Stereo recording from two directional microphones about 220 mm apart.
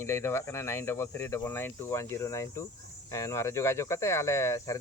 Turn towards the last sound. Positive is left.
turn(degrees=15)  # may be behind; listen again after turning